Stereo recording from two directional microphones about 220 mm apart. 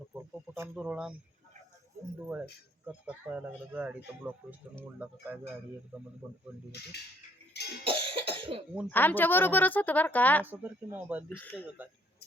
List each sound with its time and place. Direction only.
0.1 s speech: 10° right (ahead or behind)
2.2 s speech: 10° right (ahead or behind)
7.9 s cough: 25° right (ahead or behind)
8.9 s a woman's voice: 10° left (ahead or behind)
10.4 s speech: 10° right (ahead or behind)
11.3 s a woman's voice: 10° left (ahead or behind)